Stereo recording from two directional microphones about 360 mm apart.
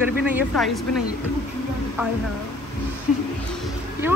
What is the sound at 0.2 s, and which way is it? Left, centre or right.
Speech, centre.